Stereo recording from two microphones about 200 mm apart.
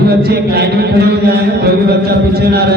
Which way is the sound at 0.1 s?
50° right (ahead or behind).